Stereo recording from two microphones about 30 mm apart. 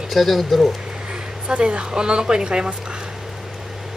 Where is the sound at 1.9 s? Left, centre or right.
Right.